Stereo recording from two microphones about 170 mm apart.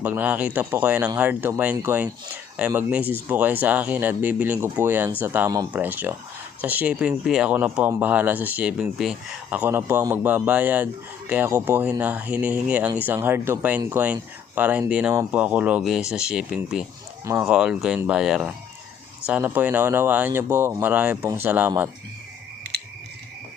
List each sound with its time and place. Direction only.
0.0 s speech: 10° right (ahead or behind)